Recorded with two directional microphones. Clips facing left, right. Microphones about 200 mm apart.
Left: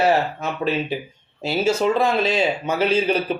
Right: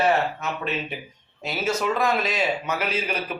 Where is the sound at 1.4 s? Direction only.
30° left (ahead or behind).